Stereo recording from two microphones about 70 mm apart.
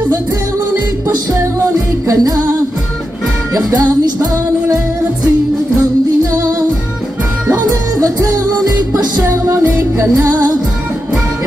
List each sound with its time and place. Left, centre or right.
2.0 s music: right
3.7 s music: right
8.0 s music: right
9.2 s music: right